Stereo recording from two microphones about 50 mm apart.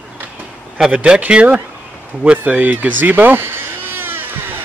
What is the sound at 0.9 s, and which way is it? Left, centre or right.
Speech, right.